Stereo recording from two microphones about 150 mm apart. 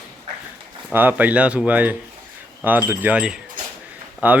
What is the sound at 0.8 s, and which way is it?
Speech, 10° right (ahead or behind).